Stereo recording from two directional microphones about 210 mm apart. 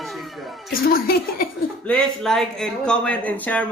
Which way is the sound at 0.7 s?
45° left (ahead or behind).